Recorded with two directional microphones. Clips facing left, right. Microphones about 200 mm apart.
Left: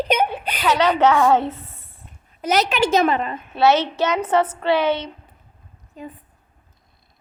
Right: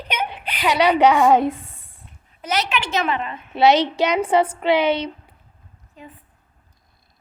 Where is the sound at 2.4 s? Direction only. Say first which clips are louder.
Left 5 dB; 40° left (ahead or behind).